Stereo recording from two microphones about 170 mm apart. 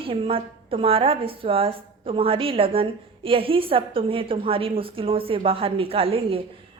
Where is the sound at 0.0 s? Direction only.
30° right (ahead or behind).